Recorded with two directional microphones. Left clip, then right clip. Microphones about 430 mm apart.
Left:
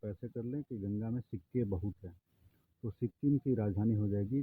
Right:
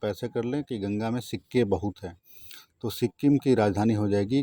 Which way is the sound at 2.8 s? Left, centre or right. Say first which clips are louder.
Right 11 dB; centre.